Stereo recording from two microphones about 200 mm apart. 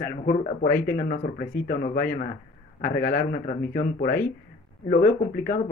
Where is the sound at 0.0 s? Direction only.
45° left (ahead or behind).